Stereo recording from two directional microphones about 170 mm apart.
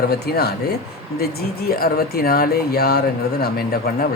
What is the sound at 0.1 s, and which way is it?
Speech, 70° left (ahead or behind).